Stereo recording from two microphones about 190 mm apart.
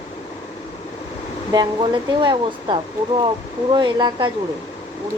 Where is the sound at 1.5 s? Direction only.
25° right (ahead or behind).